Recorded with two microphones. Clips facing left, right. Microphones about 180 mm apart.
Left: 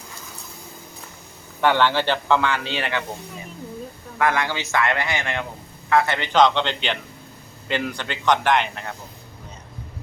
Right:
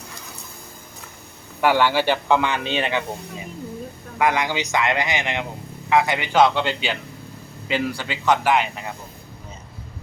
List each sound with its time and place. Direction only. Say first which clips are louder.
1.6 s speech: right 1 dB; 10° right (ahead or behind)
4.2 s speech: right 1 dB; 15° right (ahead or behind)